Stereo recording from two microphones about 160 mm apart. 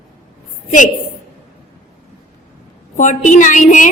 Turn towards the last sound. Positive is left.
turn(degrees=50)  # may be behind; listen again after turning